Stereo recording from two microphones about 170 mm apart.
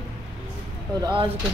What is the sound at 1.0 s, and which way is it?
Speech, 30° right (ahead or behind).